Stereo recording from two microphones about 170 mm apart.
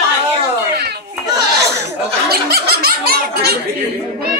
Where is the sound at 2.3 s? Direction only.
65° right (ahead or behind).